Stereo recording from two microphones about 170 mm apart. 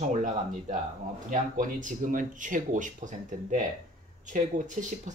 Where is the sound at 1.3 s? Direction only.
50° right (ahead or behind).